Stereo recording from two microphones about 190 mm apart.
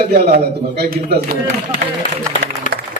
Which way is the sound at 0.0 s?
55° right (ahead or behind).